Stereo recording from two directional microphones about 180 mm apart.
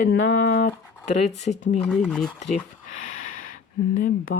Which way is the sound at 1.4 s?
40° left (ahead or behind).